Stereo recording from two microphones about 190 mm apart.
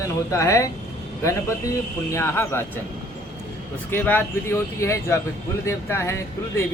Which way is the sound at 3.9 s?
10° left (ahead or behind).